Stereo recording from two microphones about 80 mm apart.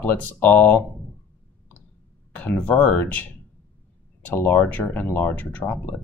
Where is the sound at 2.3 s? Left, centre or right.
Centre.